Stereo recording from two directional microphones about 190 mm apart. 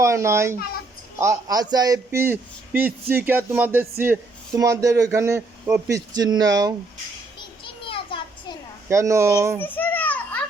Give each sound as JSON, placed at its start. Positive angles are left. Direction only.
{"t": 0.0, "sound": "a man's voice", "side_deg": -15}
{"t": 7.6, "sound": "a sound", "side_deg": 25}
{"t": 8.9, "sound": "a man's voice", "side_deg": -15}
{"t": 9.6, "sound": "children playing", "side_deg": 10}